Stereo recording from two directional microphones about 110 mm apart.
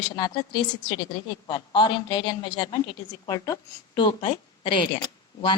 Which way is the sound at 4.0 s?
50° left (ahead or behind).